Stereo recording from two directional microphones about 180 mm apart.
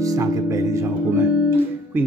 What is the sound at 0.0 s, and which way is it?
Speech, 20° right (ahead or behind).